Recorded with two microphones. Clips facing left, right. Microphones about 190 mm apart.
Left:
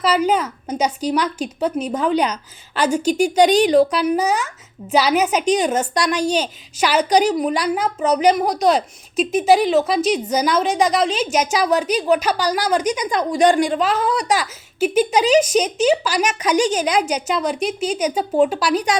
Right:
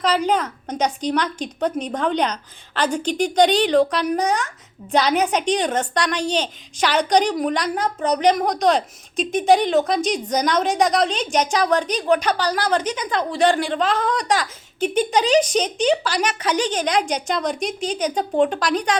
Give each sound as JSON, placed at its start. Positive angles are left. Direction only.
{"t": 0.0, "sound": "a woman's voice", "side_deg": 5}